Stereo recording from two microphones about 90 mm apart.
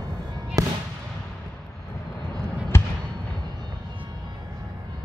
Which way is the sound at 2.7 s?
30° left (ahead or behind).